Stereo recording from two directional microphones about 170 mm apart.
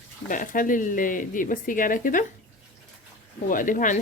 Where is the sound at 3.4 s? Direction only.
50° left (ahead or behind).